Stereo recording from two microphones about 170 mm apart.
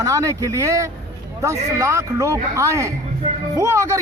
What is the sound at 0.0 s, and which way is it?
A man's voice, 20° right (ahead or behind).